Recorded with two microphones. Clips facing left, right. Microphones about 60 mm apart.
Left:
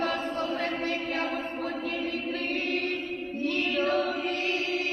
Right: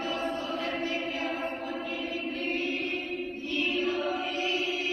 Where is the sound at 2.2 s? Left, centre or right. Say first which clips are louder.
Left 1 dB; left.